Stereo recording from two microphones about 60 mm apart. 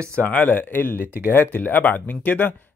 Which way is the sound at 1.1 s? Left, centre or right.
Right.